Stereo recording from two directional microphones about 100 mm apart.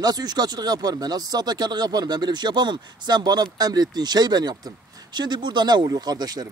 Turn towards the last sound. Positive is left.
turn(degrees=-40)  # may be behind; listen again after turning